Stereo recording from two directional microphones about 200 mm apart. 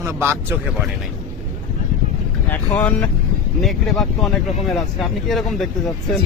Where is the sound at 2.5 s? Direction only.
10° left (ahead or behind).